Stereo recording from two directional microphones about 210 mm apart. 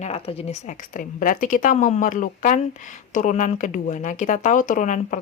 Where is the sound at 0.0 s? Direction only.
30° left (ahead or behind).